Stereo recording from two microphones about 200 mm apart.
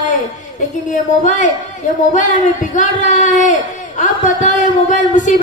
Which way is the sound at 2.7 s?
40° left (ahead or behind).